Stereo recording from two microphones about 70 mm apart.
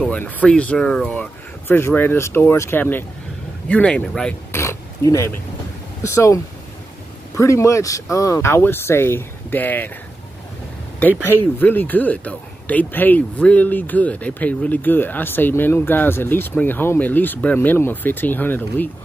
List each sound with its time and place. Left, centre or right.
0.5 s speech: centre
1.7 s speech: left; by 4.4 s centre
4.5 s oink: left
6.0 s speech: left
11.0 s speech: left